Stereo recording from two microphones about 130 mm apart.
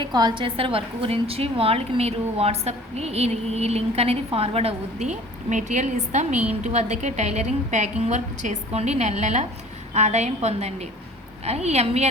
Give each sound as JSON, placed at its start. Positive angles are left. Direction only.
{"t": 0.0, "sound": "a woman's voice", "side_deg": -35}